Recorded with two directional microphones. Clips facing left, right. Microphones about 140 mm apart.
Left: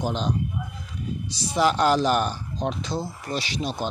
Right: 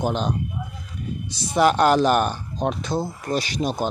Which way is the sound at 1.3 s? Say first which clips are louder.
Right 4 dB; 55° right (ahead or behind).